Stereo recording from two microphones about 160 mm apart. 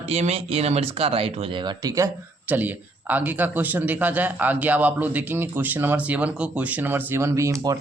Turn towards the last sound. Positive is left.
turn(degrees=-20)  # may be behind; listen again after turning